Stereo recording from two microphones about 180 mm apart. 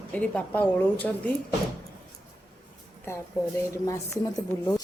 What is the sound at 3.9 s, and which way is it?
Speech, 15° left (ahead or behind).